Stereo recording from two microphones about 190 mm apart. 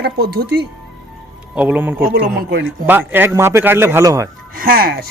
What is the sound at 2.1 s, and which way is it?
Speech, 50° right (ahead or behind).